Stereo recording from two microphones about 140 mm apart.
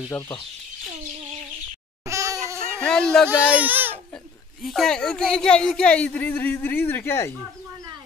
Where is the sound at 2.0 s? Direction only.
20° right (ahead or behind).